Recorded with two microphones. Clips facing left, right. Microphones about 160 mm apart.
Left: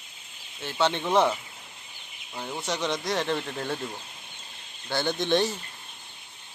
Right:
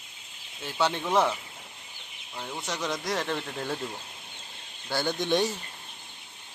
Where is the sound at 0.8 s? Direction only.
5° right (ahead or behind).